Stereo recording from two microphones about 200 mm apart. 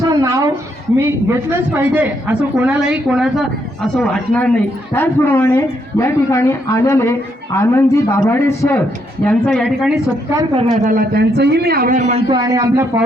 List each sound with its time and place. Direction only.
0.0 s a sound: 15° right (ahead or behind)
1.0 s a man's voice: 10° right (ahead or behind)
10.6 s a man's voice: 40° right (ahead or behind)
12.3 s a man's voice: 20° right (ahead or behind)